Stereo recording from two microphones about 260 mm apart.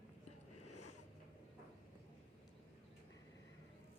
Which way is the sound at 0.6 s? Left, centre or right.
Left.